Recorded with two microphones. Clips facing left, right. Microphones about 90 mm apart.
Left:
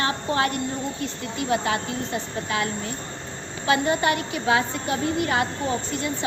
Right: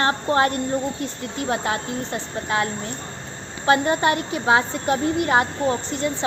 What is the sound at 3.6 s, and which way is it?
A woman's voice, 35° right (ahead or behind).